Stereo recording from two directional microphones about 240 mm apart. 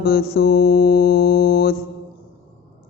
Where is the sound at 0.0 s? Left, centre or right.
Left.